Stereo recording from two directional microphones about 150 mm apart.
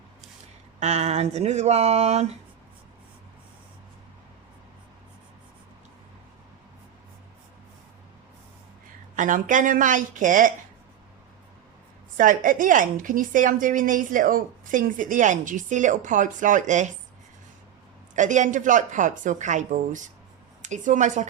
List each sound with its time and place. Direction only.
0.8 s speech: 45° right (ahead or behind)
9.1 s a woman's voice: 60° right (ahead or behind)
12.1 s a woman's voice: 65° right (ahead or behind)
18.1 s a woman's voice: 55° right (ahead or behind)